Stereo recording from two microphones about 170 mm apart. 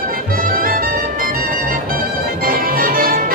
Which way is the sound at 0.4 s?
55° right (ahead or behind).